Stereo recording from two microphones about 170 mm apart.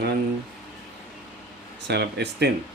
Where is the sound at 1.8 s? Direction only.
75° right (ahead or behind).